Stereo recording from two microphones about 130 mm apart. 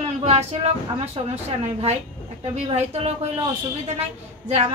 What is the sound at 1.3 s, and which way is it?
Speech, 55° right (ahead or behind).